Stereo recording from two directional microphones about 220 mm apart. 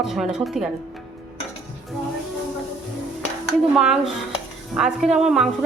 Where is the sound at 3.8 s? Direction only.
Centre (ahead or behind).